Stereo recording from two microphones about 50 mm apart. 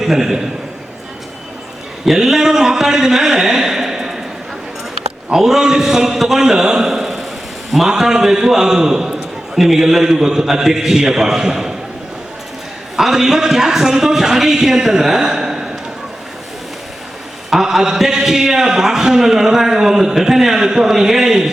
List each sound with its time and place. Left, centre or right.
0.0 s a man's voice: centre
2.0 s a man's voice: centre
5.3 s a man's voice: centre
13.0 s a man's voice: centre
17.5 s a man's voice: centre